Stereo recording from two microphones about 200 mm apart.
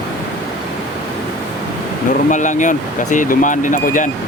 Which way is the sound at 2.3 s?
40° left (ahead or behind).